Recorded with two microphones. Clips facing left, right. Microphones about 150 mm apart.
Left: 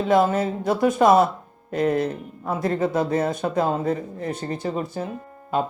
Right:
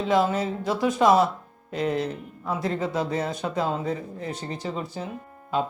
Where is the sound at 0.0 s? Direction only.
50° left (ahead or behind).